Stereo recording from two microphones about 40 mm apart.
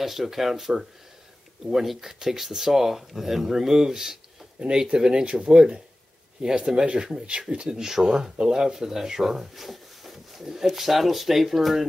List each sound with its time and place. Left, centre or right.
0.0 s speech: centre
5.2 s speech: right
5.5 s speech: centre
7.6 s speech: centre